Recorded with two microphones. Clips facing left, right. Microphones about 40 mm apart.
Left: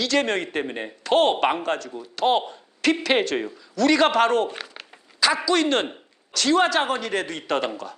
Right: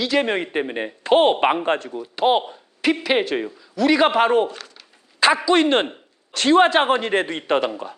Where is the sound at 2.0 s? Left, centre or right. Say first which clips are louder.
Right 2 dB; centre.